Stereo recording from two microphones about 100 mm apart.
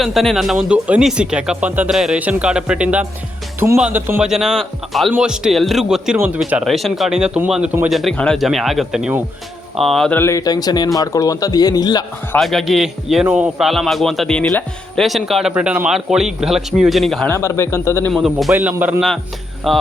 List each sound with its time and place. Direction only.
0.0 s a man's voice: centre (ahead or behind); by 1.9 s 15° right (ahead or behind)
1.9 s a man's voice: 5° right (ahead or behind)
3.6 s speech: 25° right (ahead or behind)
4.2 s a man's voice: 5° right (ahead or behind)
8.1 s speech: 10° left (ahead or behind)
8.4 s a man's voice: centre (ahead or behind)
10.1 s a man's voice: 20° left (ahead or behind)
10.3 s a man's voice: 40° left (ahead or behind)
12.4 s a man's voice: centre (ahead or behind)
15.5 s a man's voice: 15° right (ahead or behind)
17.2 s a man's voice: 30° left (ahead or behind)
18.1 s a man's voice: centre (ahead or behind)
18.5 s speech: 15° right (ahead or behind)
18.9 s a man's voice: centre (ahead or behind)